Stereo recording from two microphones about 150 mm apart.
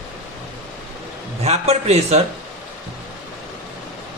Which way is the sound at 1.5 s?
45° right (ahead or behind).